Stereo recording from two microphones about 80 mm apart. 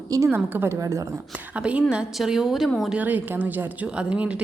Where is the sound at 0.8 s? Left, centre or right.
Right.